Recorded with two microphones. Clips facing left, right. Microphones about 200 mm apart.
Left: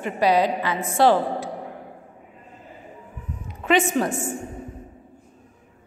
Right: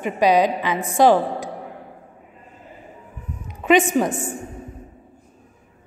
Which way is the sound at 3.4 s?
15° right (ahead or behind).